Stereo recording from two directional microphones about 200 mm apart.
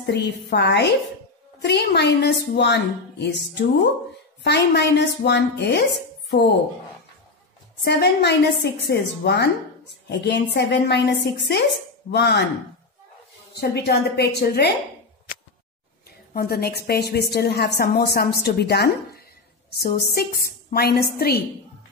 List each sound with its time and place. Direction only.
0.0 s a woman's voice: 60° left (ahead or behind)
7.8 s a woman's voice: 60° left (ahead or behind)
12.1 s a woman's voice: 60° left (ahead or behind)
13.6 s a woman's voice: 55° left (ahead or behind)
16.3 s a woman's voice: 50° left (ahead or behind)